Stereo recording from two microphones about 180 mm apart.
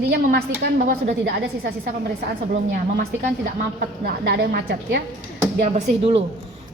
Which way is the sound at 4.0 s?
60° right (ahead or behind).